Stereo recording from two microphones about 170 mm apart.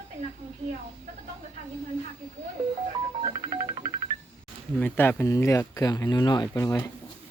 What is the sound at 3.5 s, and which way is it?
Music, 30° right (ahead or behind).